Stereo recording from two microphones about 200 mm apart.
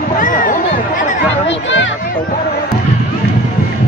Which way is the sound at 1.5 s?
65° left (ahead or behind).